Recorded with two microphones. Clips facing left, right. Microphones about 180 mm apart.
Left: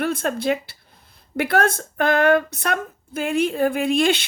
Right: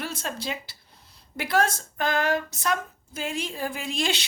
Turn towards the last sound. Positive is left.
turn(degrees=55)  # may be behind; listen again after turning